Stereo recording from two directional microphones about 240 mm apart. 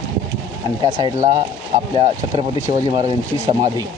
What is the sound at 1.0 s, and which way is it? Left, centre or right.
Speech, centre.